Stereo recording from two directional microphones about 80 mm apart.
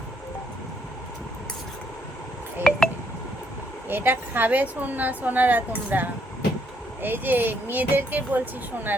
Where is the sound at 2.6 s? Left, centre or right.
Centre.